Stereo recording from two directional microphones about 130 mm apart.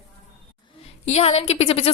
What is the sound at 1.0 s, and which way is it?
Speech, 50° left (ahead or behind).